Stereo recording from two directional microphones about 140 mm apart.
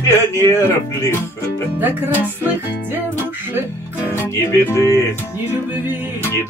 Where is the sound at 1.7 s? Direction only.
15° right (ahead or behind).